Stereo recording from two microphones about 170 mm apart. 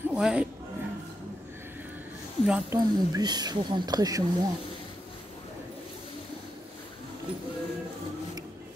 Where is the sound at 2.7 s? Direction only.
25° right (ahead or behind).